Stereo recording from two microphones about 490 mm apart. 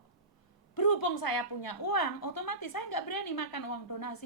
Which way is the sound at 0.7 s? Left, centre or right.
Left.